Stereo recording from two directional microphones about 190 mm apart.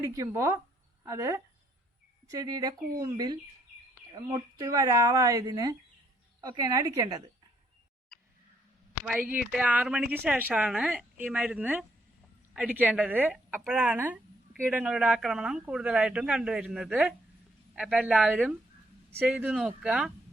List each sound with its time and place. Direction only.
0.0 s speech: 15° right (ahead or behind)
8.1 s a sound: 5° left (ahead or behind)
9.0 s speech: 5° right (ahead or behind)